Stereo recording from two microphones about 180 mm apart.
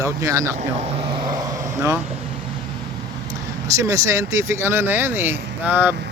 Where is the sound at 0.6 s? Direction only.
35° right (ahead or behind).